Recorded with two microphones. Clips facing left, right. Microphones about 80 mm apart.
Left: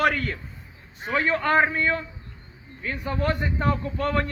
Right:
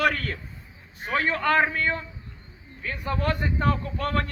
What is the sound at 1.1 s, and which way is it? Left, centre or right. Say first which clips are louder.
A man's voice: left 1 dB; left.